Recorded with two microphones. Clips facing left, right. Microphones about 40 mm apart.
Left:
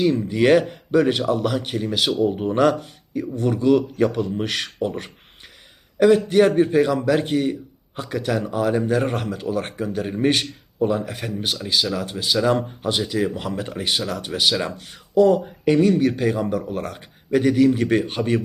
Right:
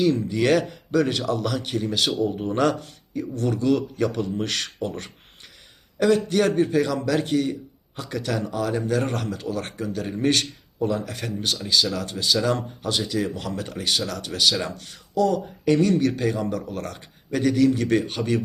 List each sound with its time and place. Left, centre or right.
0.0 s a man's voice: centre